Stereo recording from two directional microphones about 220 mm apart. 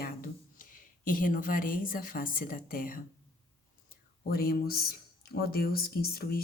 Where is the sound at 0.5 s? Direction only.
40° left (ahead or behind).